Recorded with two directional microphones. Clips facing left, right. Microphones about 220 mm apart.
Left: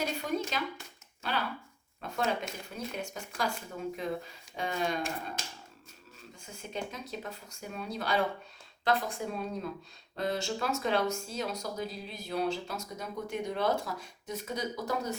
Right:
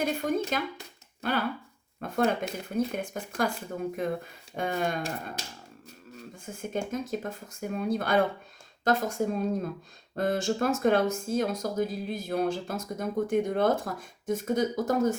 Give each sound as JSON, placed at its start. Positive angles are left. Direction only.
{"t": 0.0, "sound": "a sound", "side_deg": -50}
{"t": 2.0, "sound": "speech", "side_deg": -55}
{"t": 6.4, "sound": "speech", "side_deg": -50}